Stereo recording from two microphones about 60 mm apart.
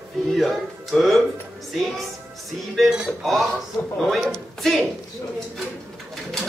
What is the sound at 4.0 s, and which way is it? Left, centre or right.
Speech, centre.